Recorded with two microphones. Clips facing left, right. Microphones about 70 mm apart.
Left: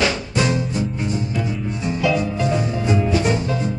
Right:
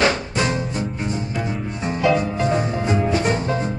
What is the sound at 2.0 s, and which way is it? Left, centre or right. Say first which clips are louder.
Music: right 2 dB; right.